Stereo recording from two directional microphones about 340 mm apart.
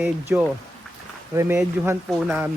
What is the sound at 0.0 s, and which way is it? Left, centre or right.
Speech, centre.